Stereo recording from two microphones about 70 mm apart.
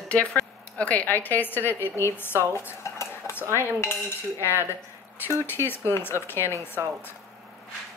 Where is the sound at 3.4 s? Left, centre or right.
Right.